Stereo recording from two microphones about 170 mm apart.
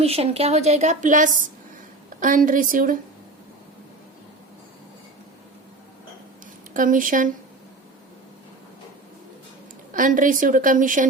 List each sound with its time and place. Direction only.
0.0 s a woman's voice: 35° right (ahead or behind); by 3.0 s 55° right (ahead or behind)
6.7 s a woman's voice: 50° right (ahead or behind)
9.9 s a woman's voice: 50° right (ahead or behind)